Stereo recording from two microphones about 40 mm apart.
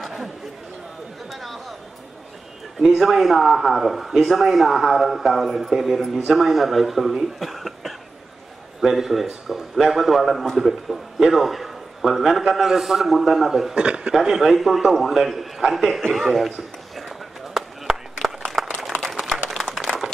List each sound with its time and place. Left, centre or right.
0.0 s chatter: centre
1.3 s chatter: centre
3.0 s a man's voice: centre
13.7 s a man's voice: right
14.4 s a man's voice: centre
17.6 s a sound: centre
19.5 s applause: centre